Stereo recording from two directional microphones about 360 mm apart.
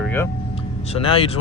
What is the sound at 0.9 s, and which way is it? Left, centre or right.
Speech, centre.